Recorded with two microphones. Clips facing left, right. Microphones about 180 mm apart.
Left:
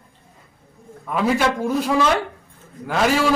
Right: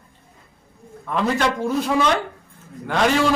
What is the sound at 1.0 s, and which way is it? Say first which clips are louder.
A man's voice: left 1 dB; 5° left (ahead or behind).